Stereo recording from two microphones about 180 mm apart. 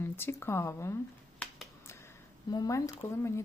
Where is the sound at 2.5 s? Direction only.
20° left (ahead or behind).